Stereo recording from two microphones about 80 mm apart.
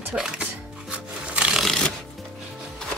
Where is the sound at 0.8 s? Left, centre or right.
Centre.